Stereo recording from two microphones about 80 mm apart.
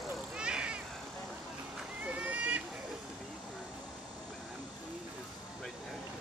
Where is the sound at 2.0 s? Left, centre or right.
Centre.